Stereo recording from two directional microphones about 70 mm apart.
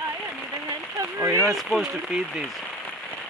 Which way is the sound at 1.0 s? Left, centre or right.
Right.